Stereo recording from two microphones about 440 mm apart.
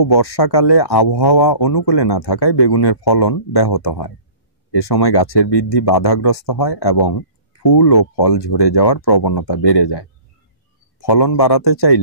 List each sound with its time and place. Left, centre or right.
0.0 s speech: left